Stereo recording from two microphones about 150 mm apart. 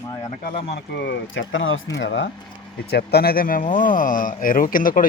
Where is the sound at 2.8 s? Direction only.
90° left; by 5.1 s 65° left (ahead or behind).